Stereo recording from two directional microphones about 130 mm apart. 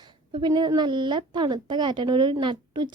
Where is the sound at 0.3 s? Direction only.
35° right (ahead or behind).